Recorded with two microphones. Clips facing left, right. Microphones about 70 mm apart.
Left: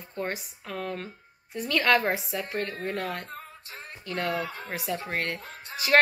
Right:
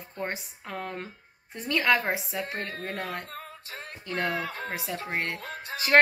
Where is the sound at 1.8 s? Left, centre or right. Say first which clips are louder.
Left 1 dB; centre.